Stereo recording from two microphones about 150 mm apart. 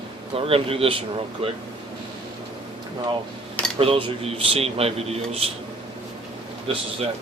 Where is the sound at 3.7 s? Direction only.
40° right (ahead or behind).